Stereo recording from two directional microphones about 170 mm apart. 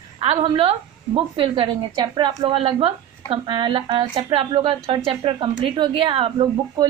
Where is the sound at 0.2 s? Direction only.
35° right (ahead or behind).